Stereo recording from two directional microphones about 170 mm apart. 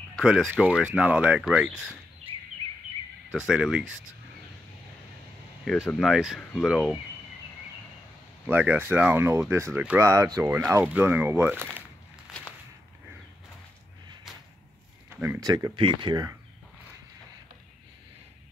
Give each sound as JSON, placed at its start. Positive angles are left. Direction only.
{"t": 0.1, "sound": "speech", "side_deg": 0}
{"t": 3.3, "sound": "speech", "side_deg": -5}
{"t": 5.7, "sound": "speech", "side_deg": 5}
{"t": 8.5, "sound": "speech", "side_deg": -10}
{"t": 15.0, "sound": "a sound", "side_deg": -10}
{"t": 15.4, "sound": "speech", "side_deg": -25}